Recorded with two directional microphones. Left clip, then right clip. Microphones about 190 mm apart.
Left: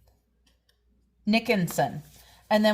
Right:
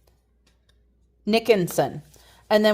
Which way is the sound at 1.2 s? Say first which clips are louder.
Right 6 dB; 45° right (ahead or behind).